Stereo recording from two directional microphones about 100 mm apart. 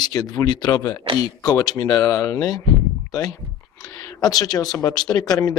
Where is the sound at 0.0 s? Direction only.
40° left (ahead or behind).